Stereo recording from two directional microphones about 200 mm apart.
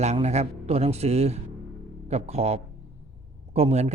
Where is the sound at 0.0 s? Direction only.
35° right (ahead or behind).